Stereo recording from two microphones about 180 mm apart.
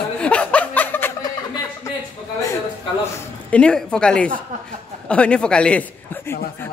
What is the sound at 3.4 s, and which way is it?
A woman's voice, 5° left (ahead or behind).